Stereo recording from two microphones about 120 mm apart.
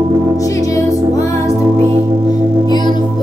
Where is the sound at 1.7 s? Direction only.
45° right (ahead or behind).